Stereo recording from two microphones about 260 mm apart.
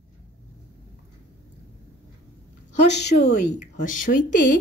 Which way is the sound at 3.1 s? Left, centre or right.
Left.